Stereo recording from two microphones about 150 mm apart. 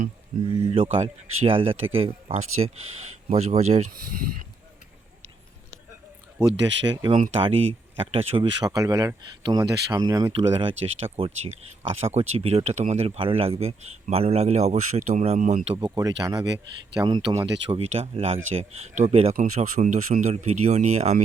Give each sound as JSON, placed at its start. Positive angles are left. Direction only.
{"t": 0.3, "sound": "speech", "side_deg": -55}
{"t": 0.7, "sound": "speech", "side_deg": -40}
{"t": 6.5, "sound": "speech", "side_deg": -35}
{"t": 8.6, "sound": "speech", "side_deg": -25}
{"t": 15.6, "sound": "speech", "side_deg": -35}
{"t": 16.0, "sound": "speech", "side_deg": -25}